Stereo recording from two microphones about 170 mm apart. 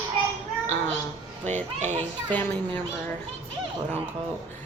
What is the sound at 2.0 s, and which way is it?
Speech, 10° left (ahead or behind).